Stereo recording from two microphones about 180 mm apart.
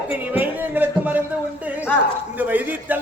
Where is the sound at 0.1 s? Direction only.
10° right (ahead or behind).